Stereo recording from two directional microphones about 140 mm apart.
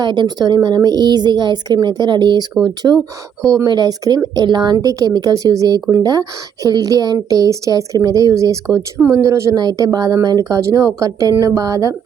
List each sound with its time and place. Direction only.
0.0 s speech: 30° right (ahead or behind)